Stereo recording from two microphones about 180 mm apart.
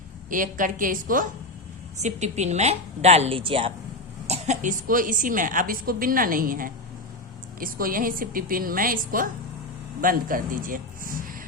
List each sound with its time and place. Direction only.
0.3 s a woman's voice: 45° right (ahead or behind); by 3.7 s 30° right (ahead or behind)
4.3 s a woman's voice: 40° right (ahead or behind)